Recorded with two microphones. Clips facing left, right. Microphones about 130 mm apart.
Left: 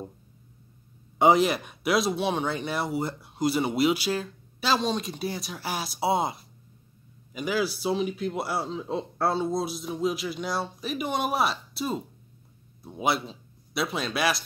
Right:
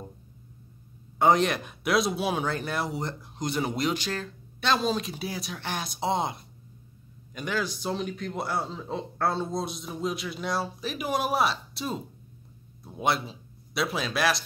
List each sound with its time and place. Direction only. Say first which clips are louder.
1.1 s speech: left 2 dB; 10° left (ahead or behind)